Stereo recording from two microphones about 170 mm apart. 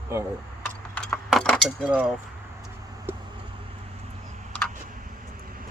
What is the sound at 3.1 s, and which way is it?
Vehicle, 15° right (ahead or behind).